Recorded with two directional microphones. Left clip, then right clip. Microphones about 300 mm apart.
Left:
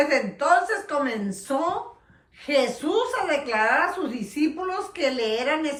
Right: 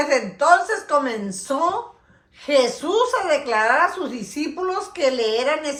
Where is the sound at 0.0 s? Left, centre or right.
Centre.